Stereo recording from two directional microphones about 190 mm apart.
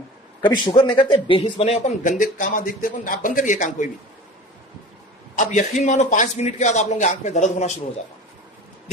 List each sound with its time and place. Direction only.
0.5 s speech: 25° left (ahead or behind); by 3.8 s 40° left (ahead or behind)
5.4 s speech: 40° left (ahead or behind)